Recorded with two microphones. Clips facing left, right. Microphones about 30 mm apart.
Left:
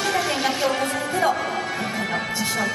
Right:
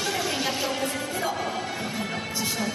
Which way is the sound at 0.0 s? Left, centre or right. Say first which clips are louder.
Left 5 dB; centre.